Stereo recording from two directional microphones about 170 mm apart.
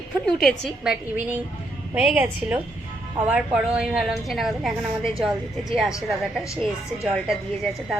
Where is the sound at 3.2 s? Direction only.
5° right (ahead or behind).